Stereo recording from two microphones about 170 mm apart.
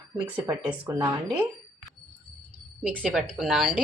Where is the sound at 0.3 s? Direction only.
10° right (ahead or behind).